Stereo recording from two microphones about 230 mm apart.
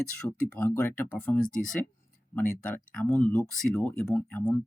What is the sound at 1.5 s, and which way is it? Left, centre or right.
Speech, left.